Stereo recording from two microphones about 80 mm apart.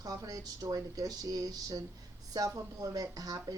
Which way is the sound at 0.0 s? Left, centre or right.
Right.